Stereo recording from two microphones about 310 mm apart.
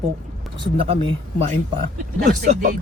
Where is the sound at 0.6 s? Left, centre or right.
Centre.